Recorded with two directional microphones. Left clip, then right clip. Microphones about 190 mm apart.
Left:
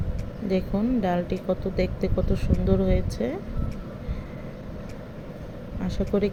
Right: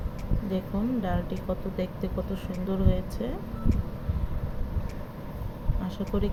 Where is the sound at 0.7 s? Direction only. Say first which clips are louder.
Left 4 dB; 30° left (ahead or behind).